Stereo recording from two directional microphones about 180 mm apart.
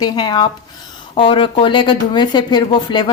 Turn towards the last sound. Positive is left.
turn(degrees=25)  # may be behind; listen again after turning